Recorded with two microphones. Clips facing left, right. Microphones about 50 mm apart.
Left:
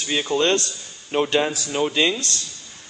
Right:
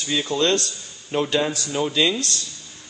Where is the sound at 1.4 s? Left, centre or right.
Centre.